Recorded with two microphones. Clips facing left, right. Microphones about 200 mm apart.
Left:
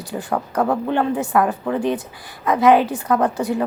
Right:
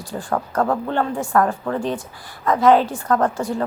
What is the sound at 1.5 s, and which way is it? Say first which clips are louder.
A woman's voice: left 2 dB; 20° left (ahead or behind).